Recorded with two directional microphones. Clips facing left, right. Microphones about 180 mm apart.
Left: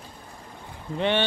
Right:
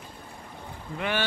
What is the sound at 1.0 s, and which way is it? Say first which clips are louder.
Speech: left 5 dB; 25° left (ahead or behind).